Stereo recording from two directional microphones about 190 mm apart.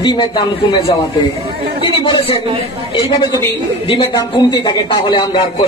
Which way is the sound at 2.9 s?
25° left (ahead or behind).